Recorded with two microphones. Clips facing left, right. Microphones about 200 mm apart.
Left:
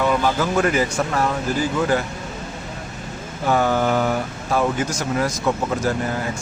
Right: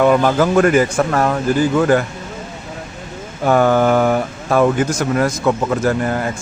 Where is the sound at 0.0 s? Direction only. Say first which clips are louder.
Right 7 dB; 55° right (ahead or behind).